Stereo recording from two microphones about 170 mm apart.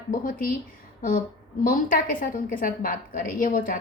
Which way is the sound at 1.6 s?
55° left (ahead or behind).